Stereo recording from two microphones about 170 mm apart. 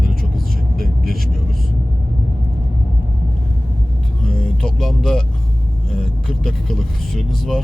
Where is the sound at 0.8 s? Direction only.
60° right (ahead or behind).